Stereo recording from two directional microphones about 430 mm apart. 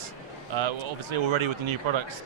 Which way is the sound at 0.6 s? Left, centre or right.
Right.